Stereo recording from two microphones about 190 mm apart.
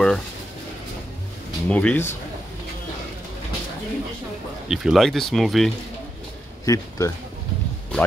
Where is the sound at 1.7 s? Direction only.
5° left (ahead or behind).